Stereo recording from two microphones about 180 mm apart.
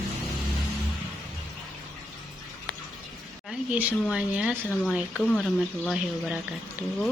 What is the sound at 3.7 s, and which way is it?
Speech, 10° right (ahead or behind).